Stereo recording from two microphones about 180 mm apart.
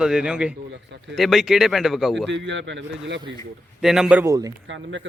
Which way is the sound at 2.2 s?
85° right.